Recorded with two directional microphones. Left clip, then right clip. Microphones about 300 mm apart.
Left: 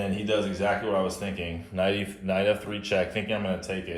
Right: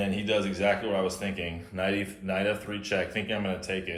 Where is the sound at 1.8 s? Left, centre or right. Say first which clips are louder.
Left 3 dB; left.